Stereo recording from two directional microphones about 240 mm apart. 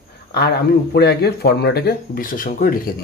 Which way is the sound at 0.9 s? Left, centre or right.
Left.